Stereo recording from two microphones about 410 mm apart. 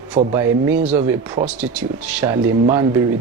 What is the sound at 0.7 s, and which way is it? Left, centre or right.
Speech, centre.